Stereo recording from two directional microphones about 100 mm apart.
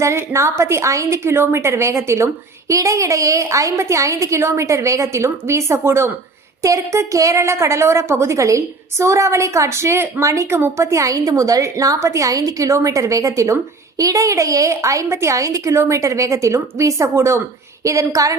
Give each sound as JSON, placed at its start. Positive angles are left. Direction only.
{"t": 0.0, "sound": "a woman's voice", "side_deg": -30}